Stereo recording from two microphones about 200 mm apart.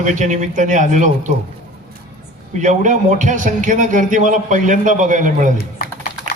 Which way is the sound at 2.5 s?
35° right (ahead or behind).